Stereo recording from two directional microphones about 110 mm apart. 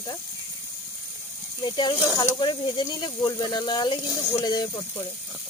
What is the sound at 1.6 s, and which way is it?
Speech, 45° left (ahead or behind).